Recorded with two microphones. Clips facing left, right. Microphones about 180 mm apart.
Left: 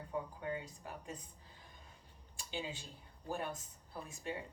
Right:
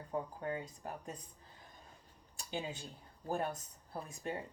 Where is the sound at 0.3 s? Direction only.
45° right (ahead or behind).